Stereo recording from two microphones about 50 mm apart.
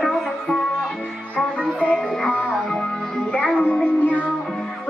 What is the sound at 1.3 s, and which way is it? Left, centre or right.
Music, left.